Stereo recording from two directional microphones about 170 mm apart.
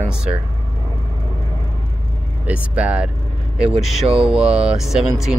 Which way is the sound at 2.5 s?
5° right (ahead or behind).